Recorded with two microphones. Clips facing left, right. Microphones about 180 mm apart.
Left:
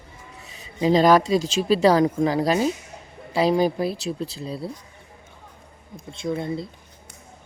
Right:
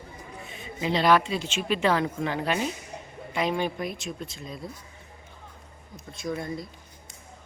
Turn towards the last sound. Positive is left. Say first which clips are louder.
# left 5 dB
turn(degrees=25)  # may be behind; listen again after turning